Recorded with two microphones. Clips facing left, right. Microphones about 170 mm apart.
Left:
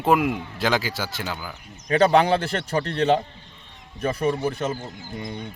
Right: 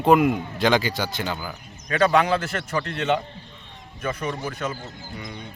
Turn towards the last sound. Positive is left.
turn(degrees=25)  # may be behind; listen again after turning